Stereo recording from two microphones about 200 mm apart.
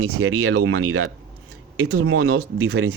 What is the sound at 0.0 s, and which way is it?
Speech, 90° right.